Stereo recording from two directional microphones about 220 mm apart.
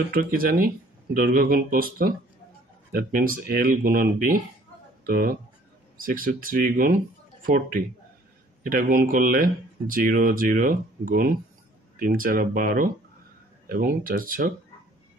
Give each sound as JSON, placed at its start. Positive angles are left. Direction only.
{"t": 0.1, "sound": "speech", "side_deg": -40}